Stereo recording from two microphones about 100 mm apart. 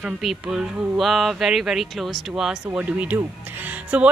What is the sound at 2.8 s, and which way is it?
Speech, 15° right (ahead or behind).